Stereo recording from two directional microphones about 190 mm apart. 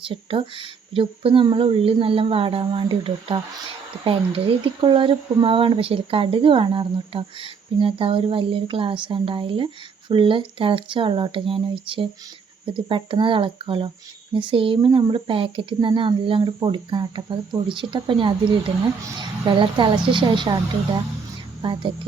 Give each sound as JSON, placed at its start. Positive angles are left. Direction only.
{"t": 0.1, "sound": "speech", "side_deg": -30}
{"t": 21.6, "sound": "speech", "side_deg": -25}